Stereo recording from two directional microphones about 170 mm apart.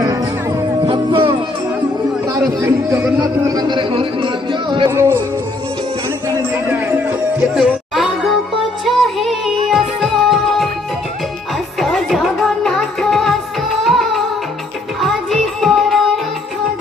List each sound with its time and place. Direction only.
0.0 s music: 20° right (ahead or behind)
2.2 s a man's voice: 20° right (ahead or behind)
4.9 s music: 15° right (ahead or behind)
6.2 s a sound: 10° right (ahead or behind)
7.3 s music: 5° right (ahead or behind)
11.8 s music: centre (ahead or behind)